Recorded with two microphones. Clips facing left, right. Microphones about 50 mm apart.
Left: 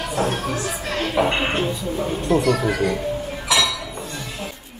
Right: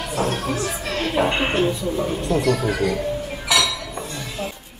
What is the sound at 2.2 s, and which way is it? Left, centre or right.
Speech, left.